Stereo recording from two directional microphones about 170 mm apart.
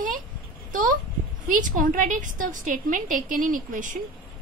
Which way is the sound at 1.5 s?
50° right (ahead or behind).